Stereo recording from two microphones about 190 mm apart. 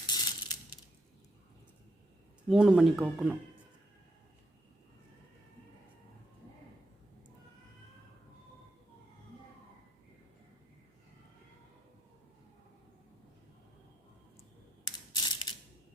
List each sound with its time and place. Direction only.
0.1 s coin: 20° left (ahead or behind)
2.5 s speech: 5° right (ahead or behind)
15.1 s mechanisms: 20° left (ahead or behind)